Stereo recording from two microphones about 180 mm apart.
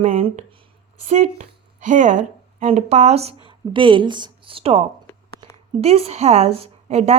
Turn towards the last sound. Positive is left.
turn(degrees=-35)  # may be behind; listen again after turning